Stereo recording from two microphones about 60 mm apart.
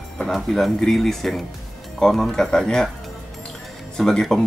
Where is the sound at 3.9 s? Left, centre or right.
Centre.